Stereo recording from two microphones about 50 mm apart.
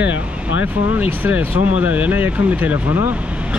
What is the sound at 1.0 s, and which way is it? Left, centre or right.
Speech, right.